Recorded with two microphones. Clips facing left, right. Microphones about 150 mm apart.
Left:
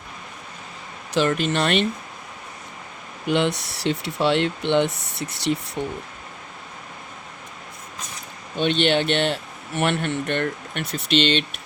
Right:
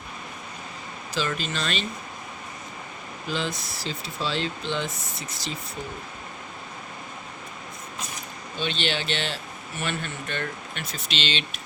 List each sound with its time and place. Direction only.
1.4 s speech: 65° left (ahead or behind)
3.2 s speech: 70° left (ahead or behind)
8.5 s speech: 60° left (ahead or behind)